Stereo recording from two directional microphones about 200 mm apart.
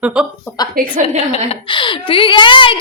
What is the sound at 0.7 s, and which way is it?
Speech, 40° right (ahead or behind).